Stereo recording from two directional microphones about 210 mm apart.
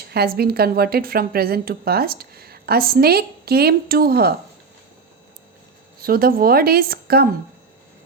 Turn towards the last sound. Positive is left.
turn(degrees=-45)  # may be behind; listen again after turning